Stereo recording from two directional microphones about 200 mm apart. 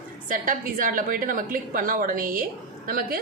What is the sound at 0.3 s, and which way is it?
A woman's voice, 45° right (ahead or behind).